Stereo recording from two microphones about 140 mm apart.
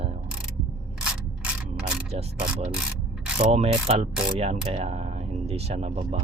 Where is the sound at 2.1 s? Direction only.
45° right (ahead or behind).